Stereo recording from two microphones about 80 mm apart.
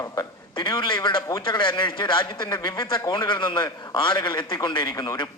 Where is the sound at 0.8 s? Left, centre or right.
Left.